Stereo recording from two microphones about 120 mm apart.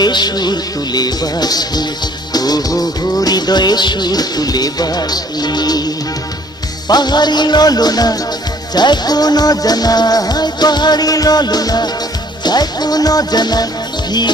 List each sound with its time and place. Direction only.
0.0 s music: 35° left (ahead or behind)